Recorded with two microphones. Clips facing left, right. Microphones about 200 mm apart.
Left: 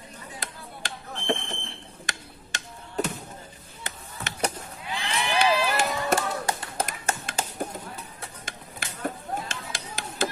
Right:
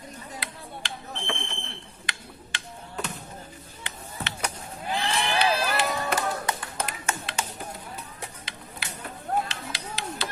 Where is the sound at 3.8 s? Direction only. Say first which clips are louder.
Right 1 dB; 45° left (ahead or behind).